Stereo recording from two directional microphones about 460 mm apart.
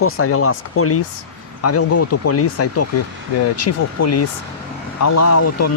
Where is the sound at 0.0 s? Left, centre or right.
Left.